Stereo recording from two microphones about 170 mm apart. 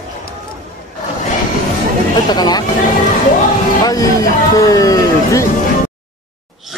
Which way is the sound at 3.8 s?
20° left (ahead or behind).